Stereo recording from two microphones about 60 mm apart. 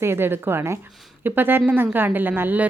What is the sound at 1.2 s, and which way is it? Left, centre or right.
A woman's voice, right.